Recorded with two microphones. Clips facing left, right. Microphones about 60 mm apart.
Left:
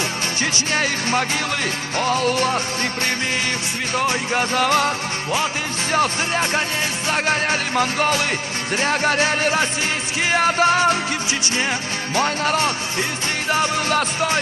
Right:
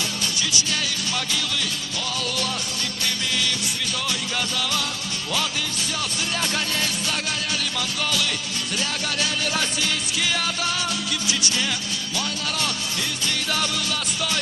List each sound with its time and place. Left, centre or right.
0.4 s music: left